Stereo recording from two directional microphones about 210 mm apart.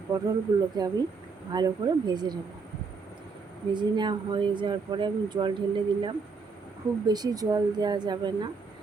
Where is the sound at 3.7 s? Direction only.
20° right (ahead or behind).